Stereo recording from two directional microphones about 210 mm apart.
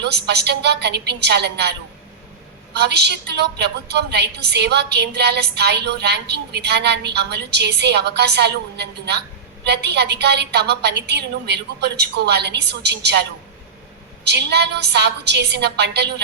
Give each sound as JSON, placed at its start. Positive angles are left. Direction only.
{"t": 0.0, "sound": "a woman's voice", "side_deg": -50}
{"t": 2.7, "sound": "a woman's voice", "side_deg": -50}
{"t": 14.3, "sound": "a woman's voice", "side_deg": -50}